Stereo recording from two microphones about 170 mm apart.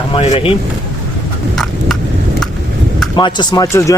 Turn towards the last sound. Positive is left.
turn(degrees=20)  # may be behind; listen again after turning